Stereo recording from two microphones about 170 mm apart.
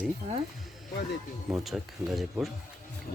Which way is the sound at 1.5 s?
Centre (ahead or behind).